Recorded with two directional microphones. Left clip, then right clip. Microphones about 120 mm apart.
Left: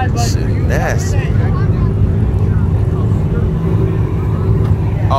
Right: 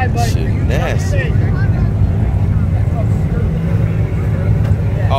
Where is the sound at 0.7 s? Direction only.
35° right (ahead or behind).